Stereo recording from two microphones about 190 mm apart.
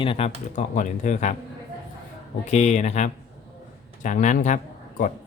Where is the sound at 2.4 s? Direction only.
35° left (ahead or behind).